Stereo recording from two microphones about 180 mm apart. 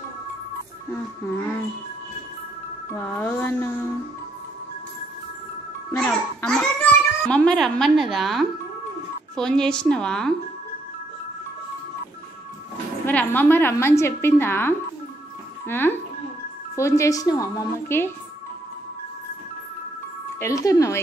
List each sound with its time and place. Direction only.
2.9 s a woman's voice: 10° left (ahead or behind)
5.9 s a child's voice: 5° left (ahead or behind)
13.0 s a woman's voice: 10° left (ahead or behind)
20.3 s a woman's voice: 15° left (ahead or behind)